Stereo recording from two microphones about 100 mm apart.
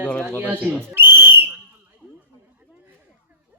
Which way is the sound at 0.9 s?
20° right (ahead or behind).